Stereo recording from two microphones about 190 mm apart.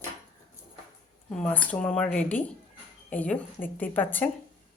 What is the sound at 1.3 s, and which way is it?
Speech, 5° left (ahead or behind).